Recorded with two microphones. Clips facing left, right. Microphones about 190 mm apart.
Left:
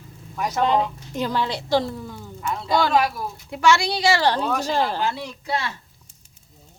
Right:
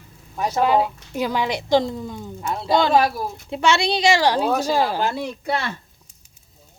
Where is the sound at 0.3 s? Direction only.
30° right (ahead or behind).